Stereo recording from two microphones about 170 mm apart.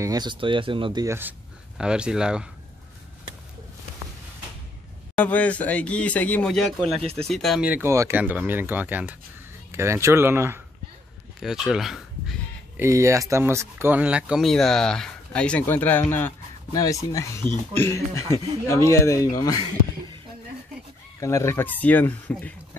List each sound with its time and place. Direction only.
0.0 s speech: 25° right (ahead or behind)
1.0 s speech: 15° right (ahead or behind)
5.1 s speech: 10° left (ahead or behind)
7.0 s speech: 35° right (ahead or behind)
7.2 s speech: centre (ahead or behind); by 10.6 s 15° right (ahead or behind)
11.3 s speech: centre (ahead or behind)
12.7 s speech: 15° right (ahead or behind); by 19.7 s 25° left (ahead or behind)
21.2 s speech: 20° left (ahead or behind)